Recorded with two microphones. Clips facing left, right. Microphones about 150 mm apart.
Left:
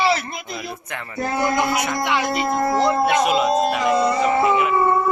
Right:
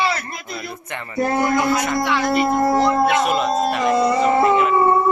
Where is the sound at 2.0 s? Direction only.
15° left (ahead or behind).